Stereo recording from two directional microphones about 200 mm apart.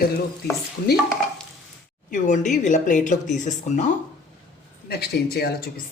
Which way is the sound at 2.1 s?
40° left (ahead or behind).